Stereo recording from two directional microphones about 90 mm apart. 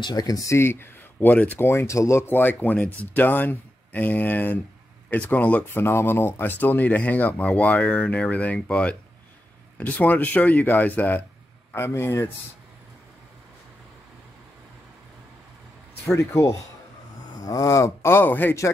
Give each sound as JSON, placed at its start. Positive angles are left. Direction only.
{"t": 0.0, "sound": "speech", "side_deg": 45}
{"t": 1.7, "sound": "speech", "side_deg": 35}
{"t": 11.7, "sound": "speech", "side_deg": 30}
{"t": 16.2, "sound": "speech", "side_deg": 35}